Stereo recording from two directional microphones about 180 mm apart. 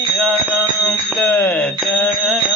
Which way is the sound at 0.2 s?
Centre (ahead or behind).